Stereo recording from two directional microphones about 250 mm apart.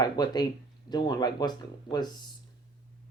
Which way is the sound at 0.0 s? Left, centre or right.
Centre.